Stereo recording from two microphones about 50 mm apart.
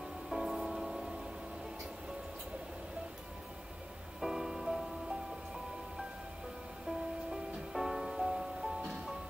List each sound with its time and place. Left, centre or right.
0.3 s music: centre
4.2 s music: centre
7.2 s music: centre